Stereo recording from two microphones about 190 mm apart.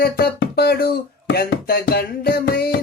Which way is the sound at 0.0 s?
55° left (ahead or behind).